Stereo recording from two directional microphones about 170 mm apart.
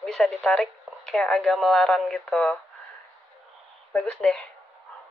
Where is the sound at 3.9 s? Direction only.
5° left (ahead or behind).